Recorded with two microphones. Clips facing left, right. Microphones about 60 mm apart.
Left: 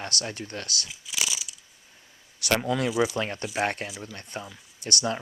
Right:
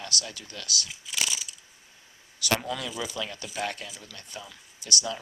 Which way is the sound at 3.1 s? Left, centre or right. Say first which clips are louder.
Left 5 dB; left.